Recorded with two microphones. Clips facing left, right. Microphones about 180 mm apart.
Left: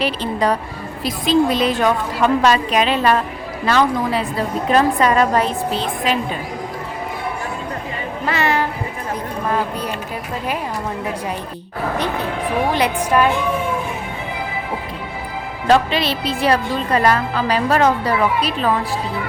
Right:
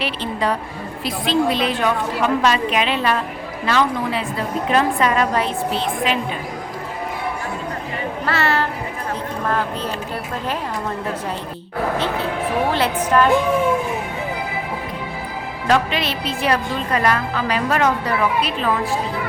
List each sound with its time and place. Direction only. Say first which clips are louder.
0.0 s speech: left 3 dB; 40° left (ahead or behind)
8.3 s a woman's voice: left 2 dB; 15° left (ahead or behind)
11.9 s a woman's voice: even; 15° left (ahead or behind)
15.6 s speech: left 3 dB; 30° left (ahead or behind)